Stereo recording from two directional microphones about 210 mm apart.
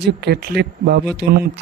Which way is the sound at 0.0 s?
50° right (ahead or behind).